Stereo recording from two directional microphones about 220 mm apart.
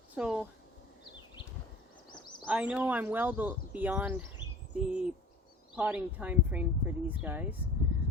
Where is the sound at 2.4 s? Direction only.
5° right (ahead or behind).